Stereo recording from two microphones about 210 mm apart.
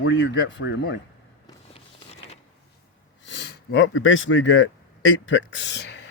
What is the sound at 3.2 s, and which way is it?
Speech, 55° left (ahead or behind).